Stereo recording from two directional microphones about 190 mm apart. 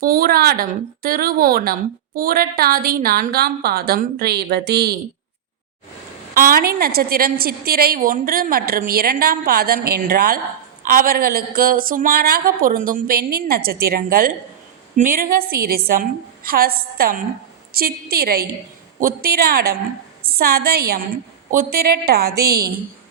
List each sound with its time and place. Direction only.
0.0 s a woman's voice: 50° right (ahead or behind)
6.3 s a woman's voice: 50° right (ahead or behind)